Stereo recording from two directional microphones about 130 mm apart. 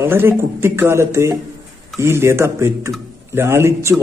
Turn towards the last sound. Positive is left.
turn(degrees=-20)  # may be behind; listen again after turning